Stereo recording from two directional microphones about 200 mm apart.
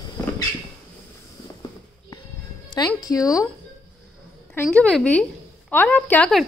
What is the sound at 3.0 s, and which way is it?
Speech, 15° left (ahead or behind).